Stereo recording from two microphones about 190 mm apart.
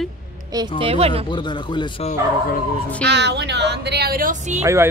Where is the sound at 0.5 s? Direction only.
25° right (ahead or behind).